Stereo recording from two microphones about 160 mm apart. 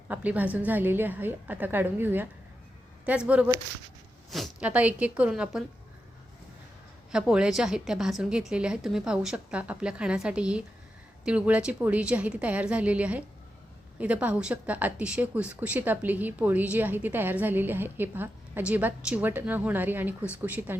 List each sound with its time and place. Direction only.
0.1 s speech: 10° right (ahead or behind)
4.3 s speech: centre (ahead or behind)
7.1 s a woman's voice: 5° right (ahead or behind)